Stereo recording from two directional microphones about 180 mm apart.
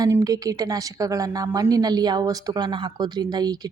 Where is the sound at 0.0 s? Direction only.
20° right (ahead or behind).